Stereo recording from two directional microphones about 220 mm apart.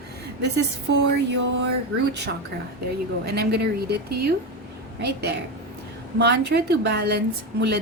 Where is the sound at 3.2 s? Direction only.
45° right (ahead or behind).